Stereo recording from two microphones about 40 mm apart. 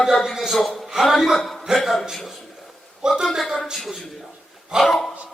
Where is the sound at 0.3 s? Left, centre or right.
Centre.